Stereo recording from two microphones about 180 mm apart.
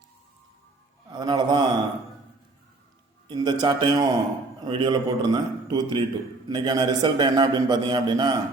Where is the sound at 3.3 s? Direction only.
25° right (ahead or behind).